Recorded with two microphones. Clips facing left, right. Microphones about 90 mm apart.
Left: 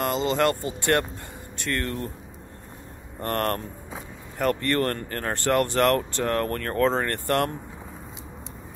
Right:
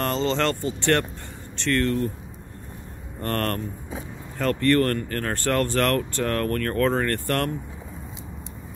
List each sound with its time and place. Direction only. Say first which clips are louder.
0.0 s speech: left 1 dB; 10° left (ahead or behind)
3.2 s speech: even; 20° left (ahead or behind)